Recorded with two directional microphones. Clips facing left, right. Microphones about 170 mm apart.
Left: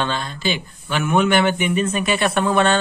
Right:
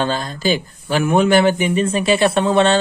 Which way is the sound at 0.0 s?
40° right (ahead or behind).